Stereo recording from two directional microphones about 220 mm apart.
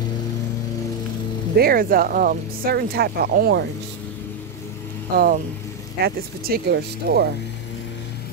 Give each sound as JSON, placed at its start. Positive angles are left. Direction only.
{"t": 1.6, "sound": "speech", "side_deg": -40}
{"t": 5.1, "sound": "speech", "side_deg": -45}